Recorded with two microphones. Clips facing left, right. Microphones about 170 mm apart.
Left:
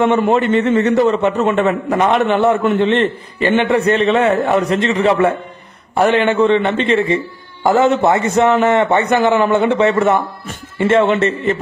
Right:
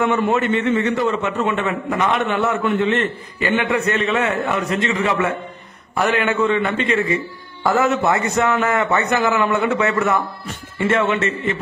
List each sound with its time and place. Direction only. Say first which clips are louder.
0.2 s a man's voice: left 4 dB; 35° left (ahead or behind)